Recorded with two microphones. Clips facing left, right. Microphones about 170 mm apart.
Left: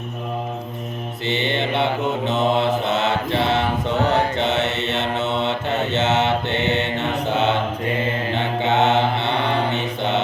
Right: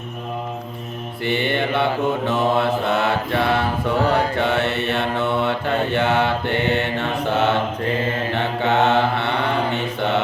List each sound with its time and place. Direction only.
1.2 s mantra: 20° left (ahead or behind)